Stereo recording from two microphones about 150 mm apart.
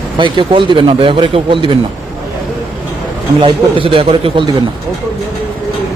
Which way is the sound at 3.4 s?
35° right (ahead or behind).